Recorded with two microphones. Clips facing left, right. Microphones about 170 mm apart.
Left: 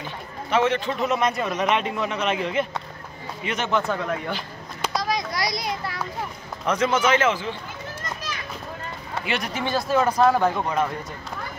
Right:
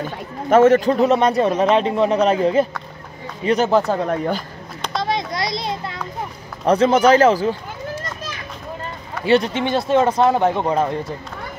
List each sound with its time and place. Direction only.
0.0 s speech: 45° right (ahead or behind)
4.9 s a sound: 25° right (ahead or behind)
6.6 s speech: 35° right (ahead or behind)
9.2 s speech: 30° right (ahead or behind)